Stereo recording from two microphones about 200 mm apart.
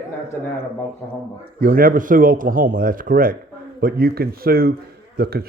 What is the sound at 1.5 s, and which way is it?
Speech, 45° right (ahead or behind).